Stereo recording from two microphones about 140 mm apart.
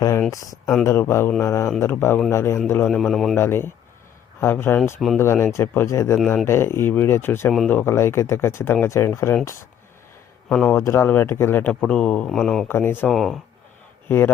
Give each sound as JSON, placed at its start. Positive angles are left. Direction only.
{"t": 0.3, "sound": "speech", "side_deg": 25}
{"t": 2.9, "sound": "a man's voice", "side_deg": 0}
{"t": 3.3, "sound": "speech", "side_deg": 15}
{"t": 10.5, "sound": "speech", "side_deg": 5}
{"t": 10.8, "sound": "a man's voice", "side_deg": 20}
{"t": 12.6, "sound": "speech", "side_deg": 15}
{"t": 13.1, "sound": "a man's voice", "side_deg": 0}
{"t": 14.1, "sound": "speech", "side_deg": 20}